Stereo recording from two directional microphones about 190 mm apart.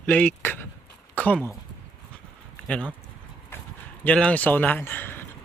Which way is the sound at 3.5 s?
10° left (ahead or behind).